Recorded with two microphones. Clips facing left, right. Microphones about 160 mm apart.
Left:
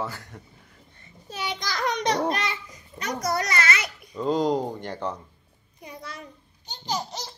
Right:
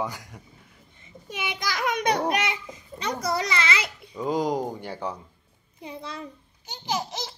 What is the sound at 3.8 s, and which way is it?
Babbling, 25° right (ahead or behind).